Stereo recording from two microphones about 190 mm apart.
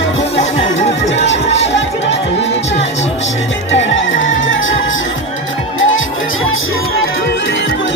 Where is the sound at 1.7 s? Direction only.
70° left (ahead or behind).